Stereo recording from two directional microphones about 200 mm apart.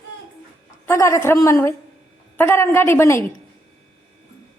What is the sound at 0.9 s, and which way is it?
A woman's voice, 15° left (ahead or behind).